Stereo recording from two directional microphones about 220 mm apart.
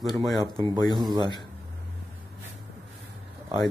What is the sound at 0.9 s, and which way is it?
Speech, 15° right (ahead or behind).